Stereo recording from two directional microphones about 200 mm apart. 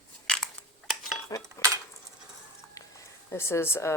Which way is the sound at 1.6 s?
15° left (ahead or behind).